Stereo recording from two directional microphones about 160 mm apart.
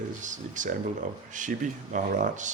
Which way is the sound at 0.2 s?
50° right (ahead or behind).